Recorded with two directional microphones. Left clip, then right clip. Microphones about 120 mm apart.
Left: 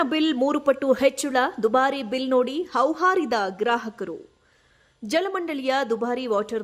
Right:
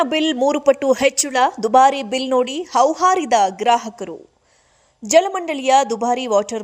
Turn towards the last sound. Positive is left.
turn(degrees=-15)  # may be behind; listen again after turning